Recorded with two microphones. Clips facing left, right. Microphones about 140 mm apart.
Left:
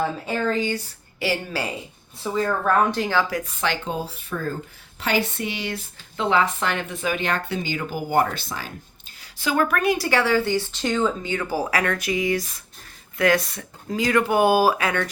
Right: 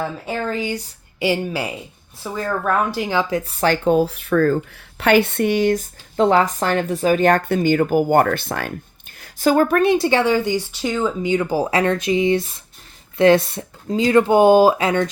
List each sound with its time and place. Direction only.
0.4 s speech: 10° right (ahead or behind)
2.3 s speech: 5° right (ahead or behind); by 3.5 s 25° right (ahead or behind)
3.8 s speech: 65° right (ahead or behind)
4.9 s speech: 65° right (ahead or behind)
9.2 s a woman's voice: 45° right (ahead or behind)
9.6 s speech: 30° right (ahead or behind)